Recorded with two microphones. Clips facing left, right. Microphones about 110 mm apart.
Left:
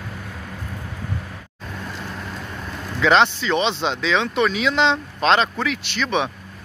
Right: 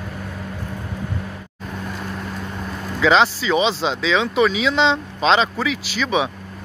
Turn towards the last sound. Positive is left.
turn(degrees=-5)  # may be behind; listen again after turning